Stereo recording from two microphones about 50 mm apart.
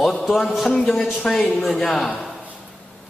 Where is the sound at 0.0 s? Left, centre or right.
Centre.